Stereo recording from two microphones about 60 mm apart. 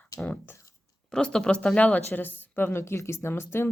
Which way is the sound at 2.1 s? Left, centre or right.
Left.